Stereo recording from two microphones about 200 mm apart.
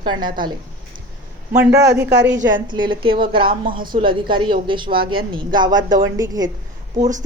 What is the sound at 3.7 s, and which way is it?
Speech, 45° right (ahead or behind).